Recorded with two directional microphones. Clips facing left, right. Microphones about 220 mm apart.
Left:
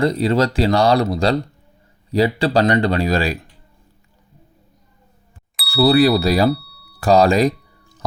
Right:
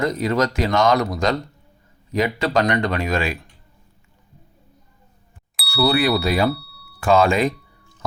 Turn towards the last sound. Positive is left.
turn(degrees=35)  # may be behind; listen again after turning